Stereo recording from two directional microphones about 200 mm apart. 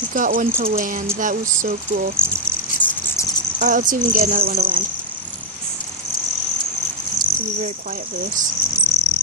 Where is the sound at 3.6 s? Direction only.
40° right (ahead or behind).